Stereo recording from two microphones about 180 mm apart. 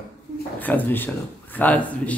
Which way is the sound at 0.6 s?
10° left (ahead or behind).